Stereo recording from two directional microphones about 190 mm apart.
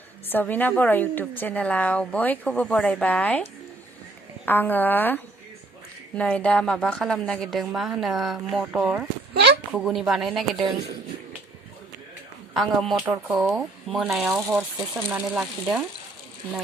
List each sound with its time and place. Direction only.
0.3 s speech: 10° left (ahead or behind)
4.4 s a woman's voice: 10° left (ahead or behind)
9.3 s a sound: 60° right (ahead or behind)
9.7 s a woman's voice: centre (ahead or behind)
12.5 s a woman's voice: centre (ahead or behind)